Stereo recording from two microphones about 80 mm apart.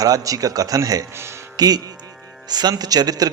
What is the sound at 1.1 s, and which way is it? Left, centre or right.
Speech, right.